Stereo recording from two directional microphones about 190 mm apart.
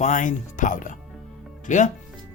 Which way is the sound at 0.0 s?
40° left (ahead or behind).